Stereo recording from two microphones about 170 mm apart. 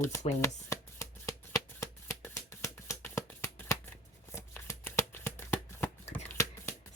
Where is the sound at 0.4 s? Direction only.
15° left (ahead or behind).